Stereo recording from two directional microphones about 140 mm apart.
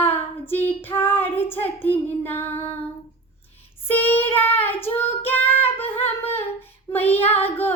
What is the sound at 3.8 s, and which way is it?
Child singing, 15° left (ahead or behind).